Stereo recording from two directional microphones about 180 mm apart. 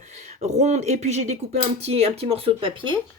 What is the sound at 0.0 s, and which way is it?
Speech, 40° right (ahead or behind).